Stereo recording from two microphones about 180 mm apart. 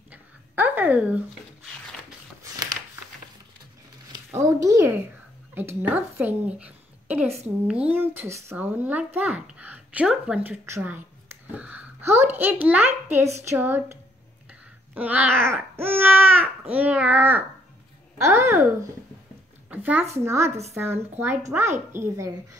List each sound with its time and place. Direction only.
0.1 s a sound: 10° right (ahead or behind)
4.1 s a woman's voice: 15° right (ahead or behind)
14.5 s babbling: 10° right (ahead or behind)
16.7 s a child's voice: 10° right (ahead or behind)
19.7 s a child's voice: 10° right (ahead or behind)